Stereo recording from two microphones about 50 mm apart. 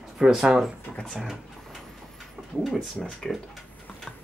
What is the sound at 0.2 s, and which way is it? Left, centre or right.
Speech, centre.